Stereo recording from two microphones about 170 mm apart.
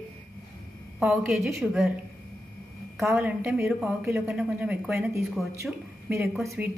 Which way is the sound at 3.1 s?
10° right (ahead or behind).